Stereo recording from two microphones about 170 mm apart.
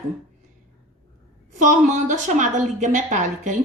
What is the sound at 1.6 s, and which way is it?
A woman's voice, 45° right (ahead or behind).